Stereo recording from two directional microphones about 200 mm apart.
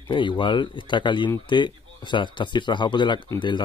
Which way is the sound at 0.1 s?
25° left (ahead or behind).